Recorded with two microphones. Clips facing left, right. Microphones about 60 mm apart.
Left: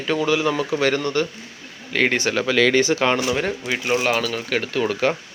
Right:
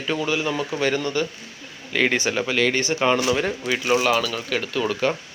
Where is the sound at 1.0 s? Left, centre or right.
Left.